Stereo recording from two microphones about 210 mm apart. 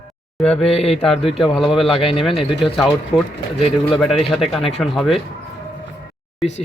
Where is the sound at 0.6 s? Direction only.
30° left (ahead or behind).